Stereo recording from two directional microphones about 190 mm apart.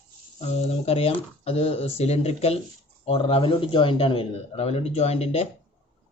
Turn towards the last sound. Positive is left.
turn(degrees=35)  # may be behind; listen again after turning